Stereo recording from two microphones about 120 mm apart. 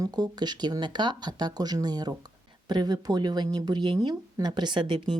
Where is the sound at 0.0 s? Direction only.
35° right (ahead or behind).